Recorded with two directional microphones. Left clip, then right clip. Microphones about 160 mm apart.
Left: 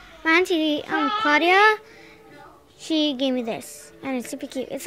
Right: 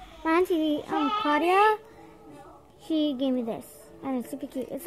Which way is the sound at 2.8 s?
10° left (ahead or behind).